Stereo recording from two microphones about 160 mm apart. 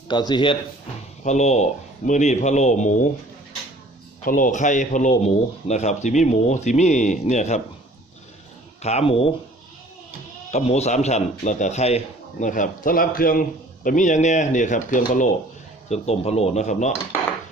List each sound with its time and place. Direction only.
0.1 s speech: 25° left (ahead or behind)
1.2 s speech: 45° left (ahead or behind)
4.3 s speech: 55° left (ahead or behind)
8.8 s speech: 40° left (ahead or behind)
10.5 s speech: 45° left (ahead or behind); by 13.4 s 65° left (ahead or behind)
13.8 s speech: 50° left (ahead or behind)
15.9 s speech: 40° left (ahead or behind)